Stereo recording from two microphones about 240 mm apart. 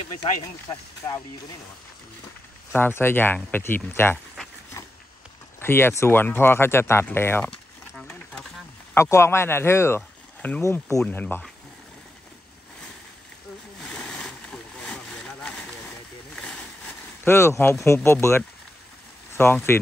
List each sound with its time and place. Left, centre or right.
0.2 s speech: centre
2.7 s speech: centre
13.9 s a sound: centre
19.3 s speech: centre